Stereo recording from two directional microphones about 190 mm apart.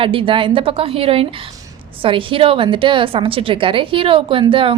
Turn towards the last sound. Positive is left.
turn(degrees=-25)  # may be behind; listen again after turning